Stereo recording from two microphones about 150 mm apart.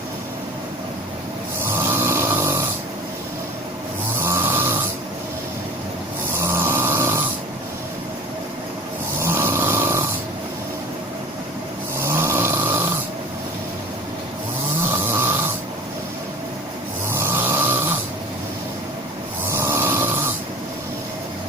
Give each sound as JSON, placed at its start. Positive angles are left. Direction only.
{"t": 1.8, "sound": "a sound", "side_deg": -15}
{"t": 4.2, "sound": "snoring", "side_deg": -15}
{"t": 6.4, "sound": "snoring", "side_deg": -15}
{"t": 9.2, "sound": "snoring", "side_deg": -15}
{"t": 11.9, "sound": "snoring", "side_deg": -15}
{"t": 14.8, "sound": "snoring", "side_deg": -15}
{"t": 17.1, "sound": "snoring", "side_deg": -15}
{"t": 19.5, "sound": "snoring", "side_deg": -15}